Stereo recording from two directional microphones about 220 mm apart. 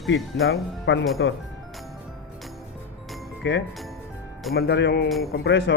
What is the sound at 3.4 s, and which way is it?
Speech, 55° left (ahead or behind).